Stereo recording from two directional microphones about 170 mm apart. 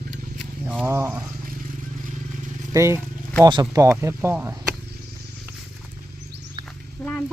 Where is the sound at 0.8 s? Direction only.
15° right (ahead or behind).